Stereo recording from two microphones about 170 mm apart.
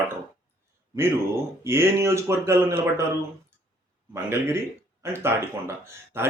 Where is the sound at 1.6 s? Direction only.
15° right (ahead or behind).